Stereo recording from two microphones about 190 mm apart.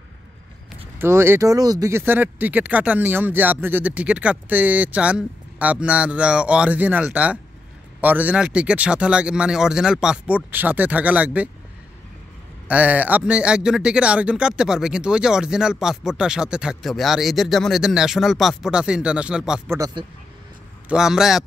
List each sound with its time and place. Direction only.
0.9 s a man's voice: 15° right (ahead or behind)
12.6 s a man's voice: 10° right (ahead or behind)
19.7 s speech: 20° right (ahead or behind)
20.9 s a man's voice: 5° right (ahead or behind)